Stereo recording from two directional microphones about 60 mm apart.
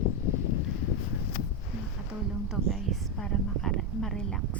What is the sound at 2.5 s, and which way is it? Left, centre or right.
A woman's voice, centre.